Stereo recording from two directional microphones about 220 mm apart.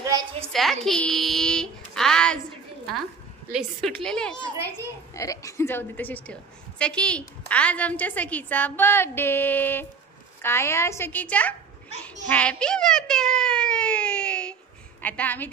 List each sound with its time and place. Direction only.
0.0 s a sound: 20° right (ahead or behind)
0.5 s a woman's voice: centre (ahead or behind)
3.5 s a child's voice: centre (ahead or behind)
5.1 s a woman's voice: 15° left (ahead or behind)